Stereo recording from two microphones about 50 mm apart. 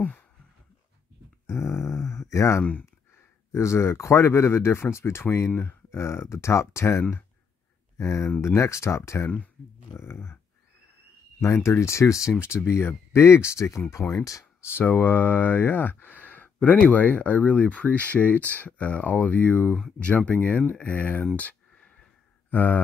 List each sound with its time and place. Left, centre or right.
1.5 s a sound: left
3.5 s speech: left
9.9 s speech: left
11.4 s speech: left
12.4 s speech: left
14.9 s speech: left
20.0 s speech: left
21.4 s a sound: left
22.5 s mantra: left